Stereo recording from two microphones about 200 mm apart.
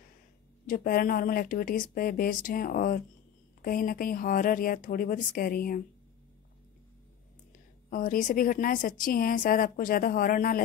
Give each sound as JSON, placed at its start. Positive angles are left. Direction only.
{"t": 0.7, "sound": "a woman's voice", "side_deg": 45}
{"t": 7.9, "sound": "a woman's voice", "side_deg": 45}